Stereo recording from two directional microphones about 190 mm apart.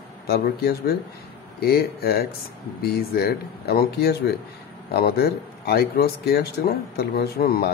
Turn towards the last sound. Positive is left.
turn(degrees=55)  # may be behind; listen again after turning